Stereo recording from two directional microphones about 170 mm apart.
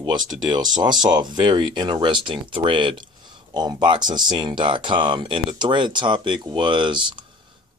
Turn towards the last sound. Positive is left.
turn(degrees=-30)  # may be behind; listen again after turning